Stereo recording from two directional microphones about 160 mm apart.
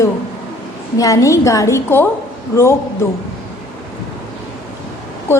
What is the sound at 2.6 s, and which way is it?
Speech, 15° left (ahead or behind).